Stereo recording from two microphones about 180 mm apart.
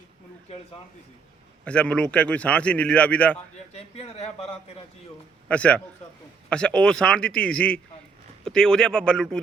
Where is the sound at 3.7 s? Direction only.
35° left (ahead or behind).